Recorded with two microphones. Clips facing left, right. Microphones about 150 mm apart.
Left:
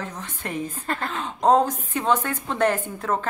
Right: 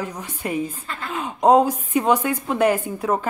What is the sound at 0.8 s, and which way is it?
Speech, 50° left (ahead or behind).